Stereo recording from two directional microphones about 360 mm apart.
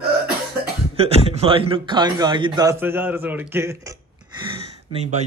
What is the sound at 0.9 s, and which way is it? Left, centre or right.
A man's voice, centre.